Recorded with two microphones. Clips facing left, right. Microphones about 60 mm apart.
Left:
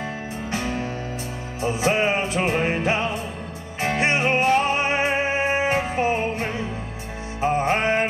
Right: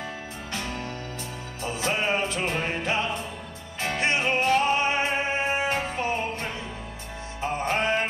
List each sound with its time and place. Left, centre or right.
0.5 s music: left